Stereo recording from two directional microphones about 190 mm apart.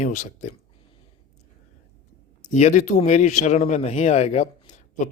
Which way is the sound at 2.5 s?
40° left (ahead or behind).